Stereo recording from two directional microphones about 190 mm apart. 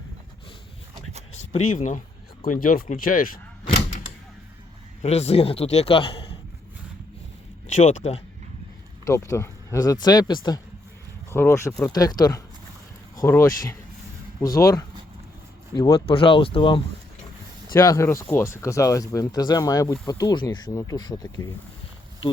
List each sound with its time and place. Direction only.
1.5 s a man's voice: 40° left (ahead or behind)
5.0 s a man's voice: 35° left (ahead or behind)
7.7 s a man's voice: 40° left (ahead or behind)
9.0 s speech: 15° left (ahead or behind)
16.0 s speech: 30° left (ahead or behind)
17.7 s speech: 15° left (ahead or behind)